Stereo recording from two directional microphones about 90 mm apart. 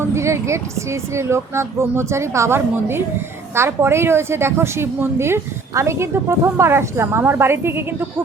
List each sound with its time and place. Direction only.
0.1 s a woman's voice: 30° right (ahead or behind)